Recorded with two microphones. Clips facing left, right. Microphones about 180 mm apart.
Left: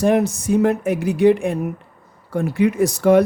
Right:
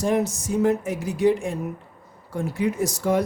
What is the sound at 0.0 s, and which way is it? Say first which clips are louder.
Speech: left 6 dB; 65° left (ahead or behind).